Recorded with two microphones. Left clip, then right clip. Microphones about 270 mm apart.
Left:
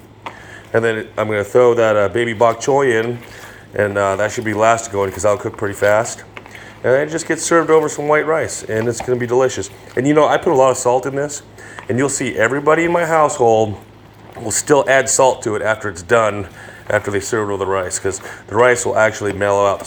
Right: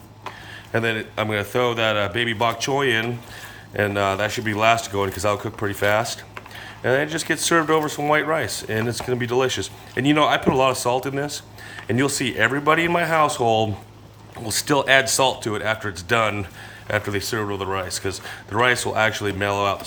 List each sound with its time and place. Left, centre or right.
0.7 s speech: right